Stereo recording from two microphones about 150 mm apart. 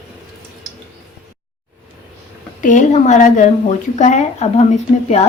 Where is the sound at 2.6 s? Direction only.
55° left (ahead or behind).